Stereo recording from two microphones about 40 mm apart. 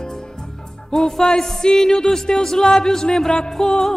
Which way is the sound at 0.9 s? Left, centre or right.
Centre.